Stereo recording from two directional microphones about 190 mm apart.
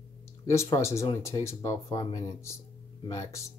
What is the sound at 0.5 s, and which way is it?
Speech, 15° left (ahead or behind).